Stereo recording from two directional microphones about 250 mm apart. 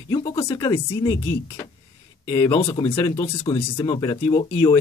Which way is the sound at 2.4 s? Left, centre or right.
Centre.